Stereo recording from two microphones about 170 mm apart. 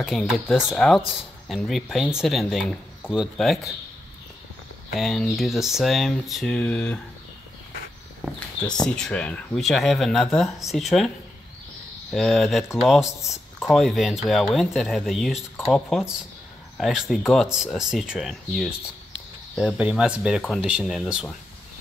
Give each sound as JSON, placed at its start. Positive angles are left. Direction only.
{"t": 0.0, "sound": "speech", "side_deg": 0}
{"t": 4.9, "sound": "speech", "side_deg": 0}
{"t": 8.7, "sound": "speech", "side_deg": 5}
{"t": 12.1, "sound": "speech", "side_deg": 0}